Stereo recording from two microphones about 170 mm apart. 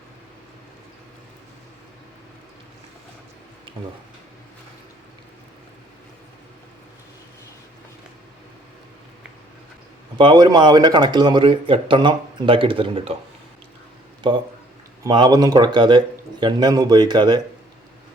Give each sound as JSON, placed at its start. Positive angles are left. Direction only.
{"t": 10.2, "sound": "a man's voice", "side_deg": -25}
{"t": 14.2, "sound": "a man's voice", "side_deg": -30}